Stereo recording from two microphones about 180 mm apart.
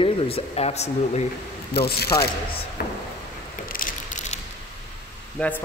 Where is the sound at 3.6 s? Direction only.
50° left (ahead or behind).